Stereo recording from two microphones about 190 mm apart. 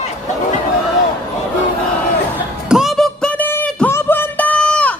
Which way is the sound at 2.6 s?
Centre (ahead or behind).